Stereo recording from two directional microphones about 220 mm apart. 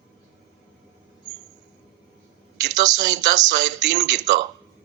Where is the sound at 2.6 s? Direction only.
50° right (ahead or behind).